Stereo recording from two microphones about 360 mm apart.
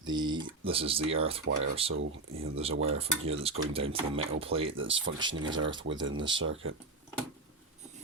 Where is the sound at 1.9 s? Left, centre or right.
Right.